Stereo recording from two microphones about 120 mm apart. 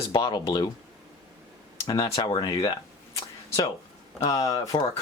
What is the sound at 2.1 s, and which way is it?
Speech, 45° left (ahead or behind).